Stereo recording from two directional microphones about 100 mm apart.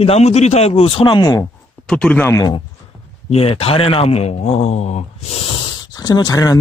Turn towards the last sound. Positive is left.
turn(degrees=40)  # may be behind; listen again after turning